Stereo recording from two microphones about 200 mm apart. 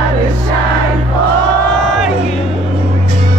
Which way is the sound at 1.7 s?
Centre (ahead or behind).